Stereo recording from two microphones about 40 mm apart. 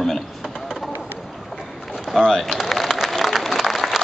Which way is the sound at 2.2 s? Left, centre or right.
Centre.